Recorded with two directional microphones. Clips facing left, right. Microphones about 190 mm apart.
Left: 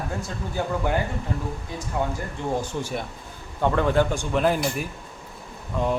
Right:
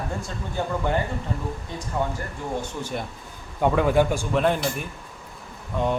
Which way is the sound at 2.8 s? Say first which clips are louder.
Left 1 dB; 10° left (ahead or behind).